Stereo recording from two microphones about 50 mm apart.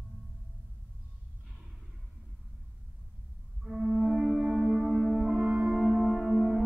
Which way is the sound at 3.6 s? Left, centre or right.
Centre.